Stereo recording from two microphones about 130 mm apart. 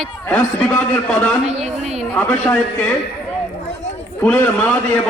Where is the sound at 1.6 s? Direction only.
55° right (ahead or behind).